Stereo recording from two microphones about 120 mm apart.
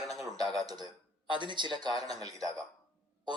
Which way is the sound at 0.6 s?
30° right (ahead or behind).